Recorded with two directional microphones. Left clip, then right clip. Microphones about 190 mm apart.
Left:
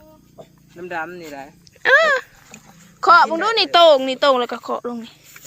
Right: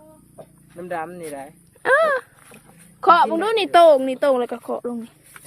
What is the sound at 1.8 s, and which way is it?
Speech, 25° right (ahead or behind).